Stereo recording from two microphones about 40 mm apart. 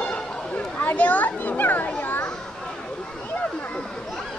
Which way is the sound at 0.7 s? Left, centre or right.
Left.